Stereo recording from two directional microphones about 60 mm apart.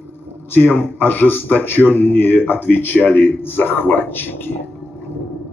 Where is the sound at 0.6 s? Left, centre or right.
Left.